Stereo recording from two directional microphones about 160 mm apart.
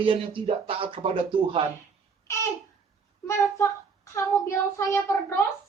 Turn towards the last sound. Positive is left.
turn(degrees=20)  # may be behind; listen again after turning